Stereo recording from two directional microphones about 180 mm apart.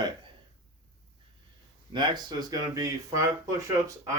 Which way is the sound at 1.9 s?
25° right (ahead or behind).